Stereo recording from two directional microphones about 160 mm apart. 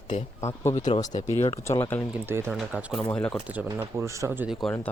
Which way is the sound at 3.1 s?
5° left (ahead or behind).